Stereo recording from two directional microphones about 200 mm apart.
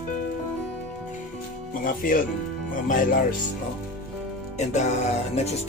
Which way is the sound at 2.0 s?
45° left (ahead or behind).